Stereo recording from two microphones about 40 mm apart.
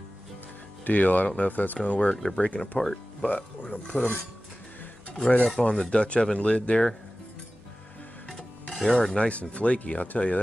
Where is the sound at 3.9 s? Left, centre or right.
Left.